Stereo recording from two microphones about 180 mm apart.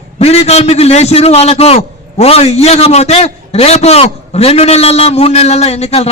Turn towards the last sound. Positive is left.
turn(degrees=35)  # may be behind; listen again after turning